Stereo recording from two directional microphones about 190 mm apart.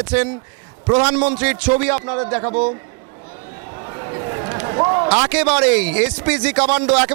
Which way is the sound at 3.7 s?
25° right (ahead or behind).